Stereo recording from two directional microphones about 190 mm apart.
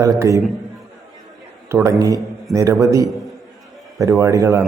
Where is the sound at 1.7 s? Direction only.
15° right (ahead or behind).